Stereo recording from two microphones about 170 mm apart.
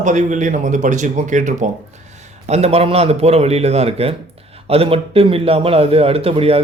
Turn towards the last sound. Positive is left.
turn(degrees=-35)  # may be behind; listen again after turning